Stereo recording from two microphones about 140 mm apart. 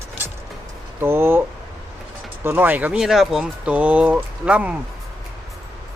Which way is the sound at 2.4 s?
15° right (ahead or behind).